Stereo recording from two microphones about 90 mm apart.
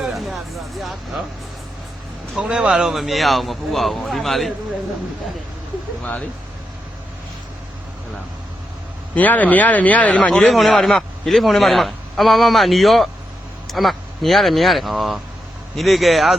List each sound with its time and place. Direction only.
0.0 s music: centre (ahead or behind)
0.8 s a man's voice: centre (ahead or behind)
2.3 s a man's voice: 10° right (ahead or behind)
6.0 s speech: 15° left (ahead or behind)
9.1 s speech: 20° left (ahead or behind)
10.3 s a man's voice: centre (ahead or behind)